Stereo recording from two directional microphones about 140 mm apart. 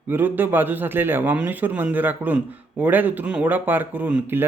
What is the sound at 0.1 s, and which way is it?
A man's voice, 15° right (ahead or behind).